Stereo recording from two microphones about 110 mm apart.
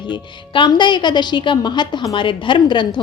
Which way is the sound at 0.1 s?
45° left (ahead or behind).